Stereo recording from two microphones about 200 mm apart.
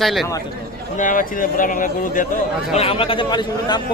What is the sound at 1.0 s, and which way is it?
Speech, 40° left (ahead or behind).